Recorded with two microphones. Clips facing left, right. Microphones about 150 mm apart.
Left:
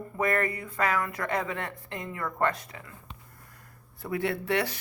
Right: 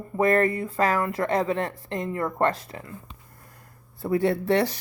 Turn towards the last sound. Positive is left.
turn(degrees=-35)  # may be behind; listen again after turning